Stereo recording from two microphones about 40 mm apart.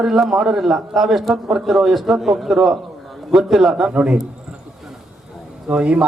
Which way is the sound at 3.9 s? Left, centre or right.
Right.